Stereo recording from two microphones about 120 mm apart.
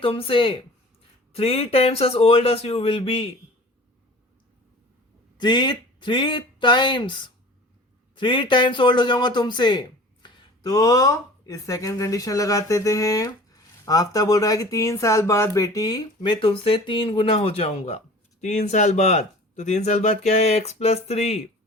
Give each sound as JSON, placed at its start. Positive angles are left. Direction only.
{"t": 0.0, "sound": "speech", "side_deg": 50}
{"t": 5.4, "sound": "speech", "side_deg": 35}
{"t": 17.7, "sound": "speech", "side_deg": 70}